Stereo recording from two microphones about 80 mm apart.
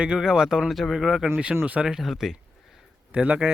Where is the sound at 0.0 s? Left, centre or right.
Centre.